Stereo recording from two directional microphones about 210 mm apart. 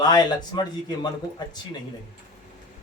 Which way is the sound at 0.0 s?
20° left (ahead or behind).